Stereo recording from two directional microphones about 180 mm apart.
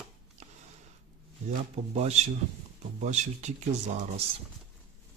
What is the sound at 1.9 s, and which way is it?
Speech, 35° right (ahead or behind).